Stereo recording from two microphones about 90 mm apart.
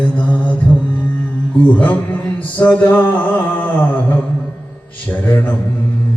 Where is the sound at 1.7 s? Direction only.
15° left (ahead or behind).